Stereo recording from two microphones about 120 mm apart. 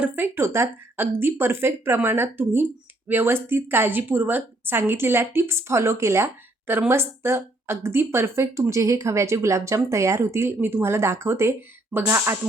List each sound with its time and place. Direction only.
0.0 s a woman's voice: 20° right (ahead or behind)